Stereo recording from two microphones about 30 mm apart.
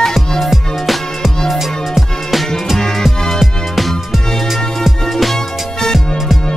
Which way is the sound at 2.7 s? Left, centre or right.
Centre.